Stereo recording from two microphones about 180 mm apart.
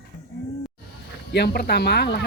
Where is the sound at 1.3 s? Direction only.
65° left (ahead or behind).